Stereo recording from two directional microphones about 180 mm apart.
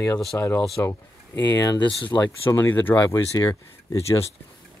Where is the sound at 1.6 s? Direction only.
25° left (ahead or behind).